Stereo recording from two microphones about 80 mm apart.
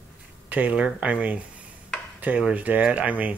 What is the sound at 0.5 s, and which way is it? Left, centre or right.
Speech, centre.